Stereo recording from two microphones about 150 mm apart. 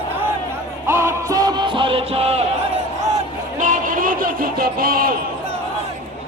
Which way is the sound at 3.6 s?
60° right (ahead or behind).